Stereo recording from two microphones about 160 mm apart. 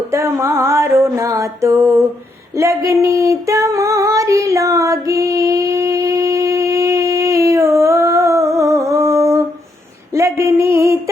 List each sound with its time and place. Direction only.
0.1 s music: 15° right (ahead or behind)
2.6 s female singing: 20° right (ahead or behind)
10.2 s a sound: 20° right (ahead or behind)